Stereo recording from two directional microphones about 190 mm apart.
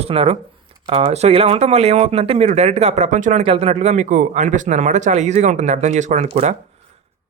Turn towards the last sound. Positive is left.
turn(degrees=-35)  # may be behind; listen again after turning